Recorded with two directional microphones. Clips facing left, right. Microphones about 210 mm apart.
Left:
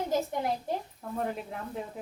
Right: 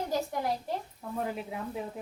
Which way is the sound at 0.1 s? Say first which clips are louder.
Left 2 dB; 20° left (ahead or behind).